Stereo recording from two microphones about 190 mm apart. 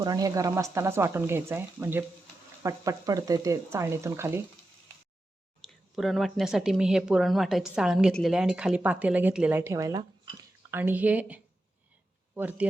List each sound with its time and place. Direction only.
0.0 s speech: 20° right (ahead or behind)
5.6 s speech: centre (ahead or behind)